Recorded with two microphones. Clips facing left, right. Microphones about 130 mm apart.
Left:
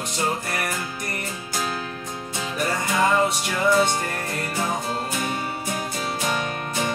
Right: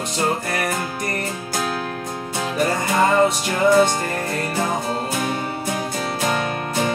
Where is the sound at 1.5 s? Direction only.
50° right (ahead or behind).